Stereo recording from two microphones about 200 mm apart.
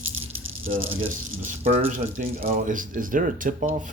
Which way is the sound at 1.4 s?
35° right (ahead or behind).